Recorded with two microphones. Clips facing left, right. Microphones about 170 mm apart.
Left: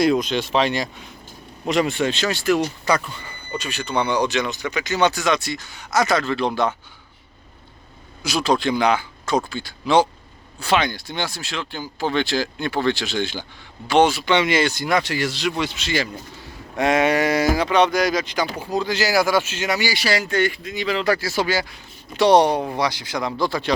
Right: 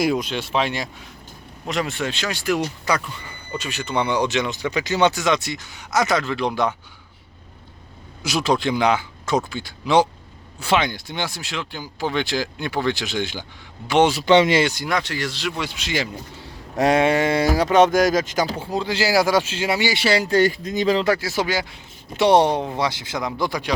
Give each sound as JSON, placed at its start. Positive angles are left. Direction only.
{"t": 0.0, "sound": "speech", "side_deg": -5}
{"t": 3.6, "sound": "speech", "side_deg": -20}
{"t": 8.2, "sound": "speech", "side_deg": -20}
{"t": 14.1, "sound": "speech", "side_deg": -40}
{"t": 14.6, "sound": "speech", "side_deg": -15}
{"t": 14.8, "sound": "speech", "side_deg": 5}
{"t": 16.7, "sound": "speech", "side_deg": -35}
{"t": 18.5, "sound": "speech", "side_deg": -25}
{"t": 21.0, "sound": "speech", "side_deg": -20}
{"t": 22.4, "sound": "speech", "side_deg": 15}
{"t": 22.8, "sound": "speech", "side_deg": -25}